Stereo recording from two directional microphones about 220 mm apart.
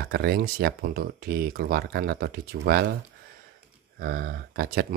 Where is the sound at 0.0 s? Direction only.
45° right (ahead or behind).